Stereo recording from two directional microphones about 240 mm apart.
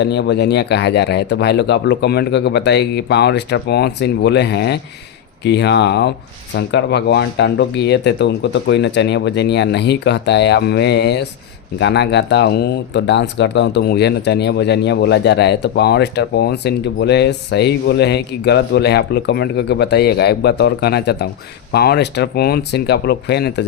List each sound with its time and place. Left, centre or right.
0.0 s speech: left